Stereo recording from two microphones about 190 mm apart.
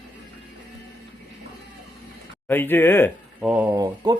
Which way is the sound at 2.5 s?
10° left (ahead or behind).